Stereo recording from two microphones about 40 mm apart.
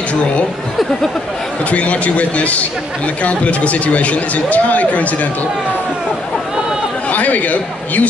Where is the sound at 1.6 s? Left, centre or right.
Left.